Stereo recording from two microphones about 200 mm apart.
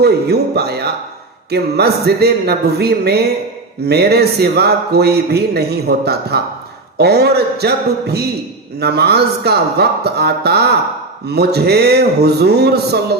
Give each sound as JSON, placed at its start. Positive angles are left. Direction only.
{"t": 0.0, "sound": "speech", "side_deg": -55}